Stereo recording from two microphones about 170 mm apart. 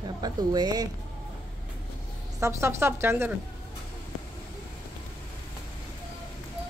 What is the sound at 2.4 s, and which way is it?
Speech, 15° right (ahead or behind).